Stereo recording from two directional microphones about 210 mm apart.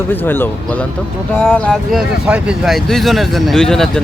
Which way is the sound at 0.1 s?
10° left (ahead or behind).